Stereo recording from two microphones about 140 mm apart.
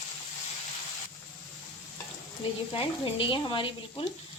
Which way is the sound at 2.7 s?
40° left (ahead or behind).